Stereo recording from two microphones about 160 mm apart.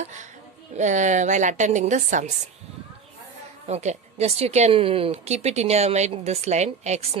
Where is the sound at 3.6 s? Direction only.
45° right (ahead or behind).